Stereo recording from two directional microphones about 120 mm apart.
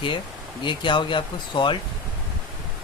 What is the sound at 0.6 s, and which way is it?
Speech, 40° left (ahead or behind).